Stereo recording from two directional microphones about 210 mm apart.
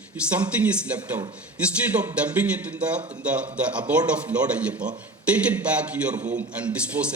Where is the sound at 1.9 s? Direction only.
20° right (ahead or behind).